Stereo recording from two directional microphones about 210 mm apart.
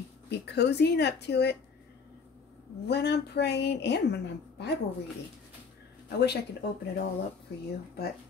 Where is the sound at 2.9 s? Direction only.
50° left (ahead or behind).